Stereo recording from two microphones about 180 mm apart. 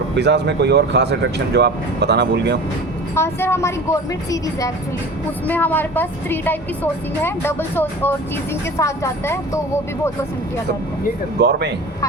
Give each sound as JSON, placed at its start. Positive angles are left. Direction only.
{"t": 0.2, "sound": "speech", "side_deg": -70}
{"t": 3.2, "sound": "a woman's voice", "side_deg": 15}
{"t": 5.5, "sound": "a woman's voice", "side_deg": 10}
{"t": 11.3, "sound": "speech", "side_deg": -70}